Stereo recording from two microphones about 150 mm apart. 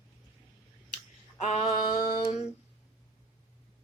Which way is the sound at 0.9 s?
50° left (ahead or behind).